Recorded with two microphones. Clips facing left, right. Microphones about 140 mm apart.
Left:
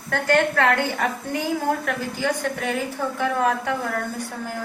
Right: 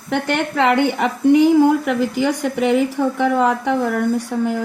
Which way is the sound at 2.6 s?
80° right.